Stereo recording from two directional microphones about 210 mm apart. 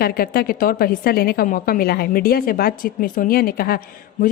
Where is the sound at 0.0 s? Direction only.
45° left (ahead or behind).